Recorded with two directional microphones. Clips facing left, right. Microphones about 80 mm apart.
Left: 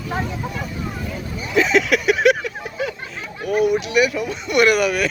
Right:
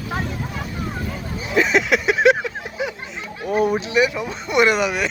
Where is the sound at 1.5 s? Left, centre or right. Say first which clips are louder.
Left 1 dB; right.